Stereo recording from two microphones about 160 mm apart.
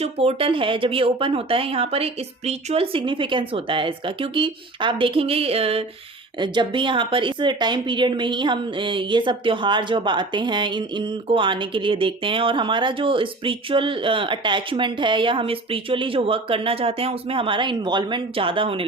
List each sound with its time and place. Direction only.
0.0 s speech: 40° right (ahead or behind)